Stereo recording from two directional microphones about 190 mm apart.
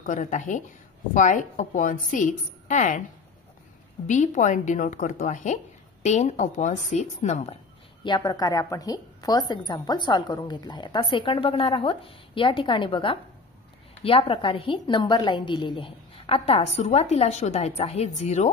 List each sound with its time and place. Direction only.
0.0 s a woman's voice: 40° left (ahead or behind)
4.1 s a woman's voice: 40° left (ahead or behind)
8.0 s a woman's voice: 20° left (ahead or behind); by 18.5 s 35° left (ahead or behind)